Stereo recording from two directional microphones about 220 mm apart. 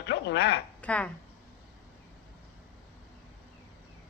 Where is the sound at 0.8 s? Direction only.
5° left (ahead or behind).